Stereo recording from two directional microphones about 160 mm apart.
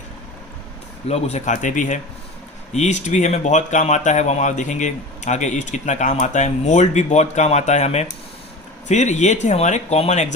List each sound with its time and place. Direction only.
1.0 s speech: 45° left (ahead or behind)